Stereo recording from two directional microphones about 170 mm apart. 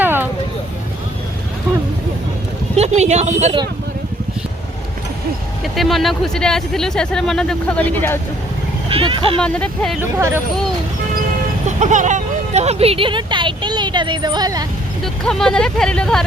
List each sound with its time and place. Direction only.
0.0 s vehicle: 10° right (ahead or behind)
2.7 s speech: 40° right (ahead or behind)
5.6 s speech: centre (ahead or behind)
8.9 s speech: 30° right (ahead or behind)
9.4 s speech: 5° left (ahead or behind)
10.0 s speech: 15° right (ahead or behind)
11.6 s speech: 45° right (ahead or behind); by 14.7 s 20° right (ahead or behind)
15.0 s speech: 5° left (ahead or behind)